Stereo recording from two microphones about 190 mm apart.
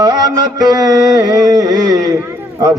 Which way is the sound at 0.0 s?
20° right (ahead or behind).